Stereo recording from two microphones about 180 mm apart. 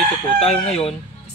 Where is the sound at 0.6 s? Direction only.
35° left (ahead or behind).